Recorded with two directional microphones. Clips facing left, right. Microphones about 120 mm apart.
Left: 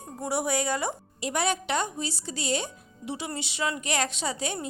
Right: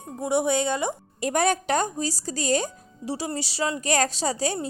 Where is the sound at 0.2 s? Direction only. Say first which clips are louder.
Right 5 dB; 20° right (ahead or behind).